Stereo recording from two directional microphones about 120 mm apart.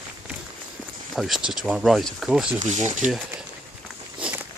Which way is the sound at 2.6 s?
85° right.